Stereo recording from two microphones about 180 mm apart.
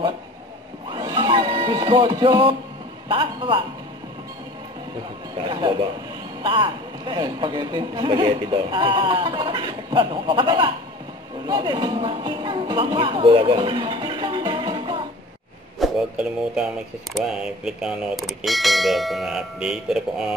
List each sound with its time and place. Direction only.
0.8 s music: 25° right (ahead or behind)
3.1 s speech: 30° right (ahead or behind)
5.5 s speech: 25° right (ahead or behind)
15.8 s speech: 5° right (ahead or behind)